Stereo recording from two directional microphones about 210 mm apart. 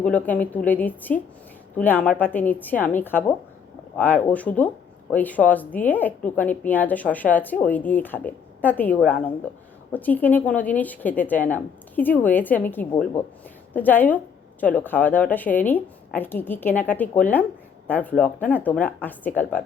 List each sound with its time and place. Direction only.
0.0 s speech: 5° left (ahead or behind)